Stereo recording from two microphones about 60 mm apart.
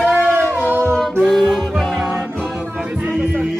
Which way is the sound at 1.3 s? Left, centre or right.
Centre.